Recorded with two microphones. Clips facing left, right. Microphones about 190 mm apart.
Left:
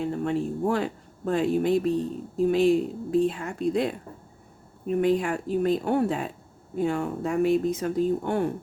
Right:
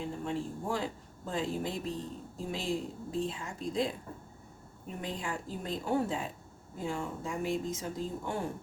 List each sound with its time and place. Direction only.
0.0 s speech: 65° left (ahead or behind)